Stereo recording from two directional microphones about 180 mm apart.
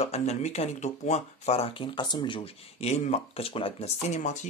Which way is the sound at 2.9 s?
40° left (ahead or behind).